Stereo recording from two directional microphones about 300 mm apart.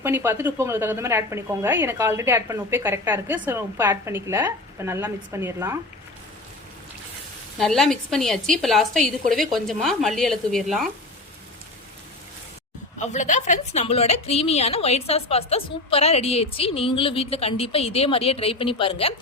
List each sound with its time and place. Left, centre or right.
0.0 s a woman's voice: centre
7.6 s a woman's voice: centre
13.0 s a woman's voice: left